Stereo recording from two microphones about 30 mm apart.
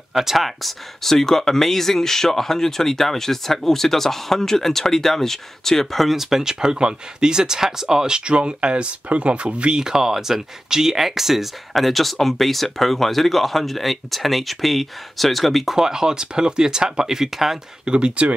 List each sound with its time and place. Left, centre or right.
0.1 s speech: centre
1.1 s speech: centre
6.0 s speech: centre
6.6 s speech: right
8.2 s speech: right
9.8 s speech: right; by 15.7 s centre
15.7 s speech: centre
17.8 s speech: right